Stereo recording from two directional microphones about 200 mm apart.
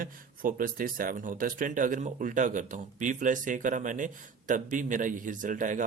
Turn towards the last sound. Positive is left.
turn(degrees=-40)  # may be behind; listen again after turning